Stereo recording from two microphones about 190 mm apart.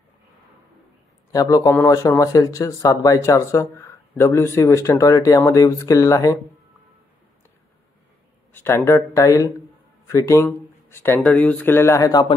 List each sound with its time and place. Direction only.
1.3 s speech: 20° left (ahead or behind)
8.5 s speech: 15° left (ahead or behind)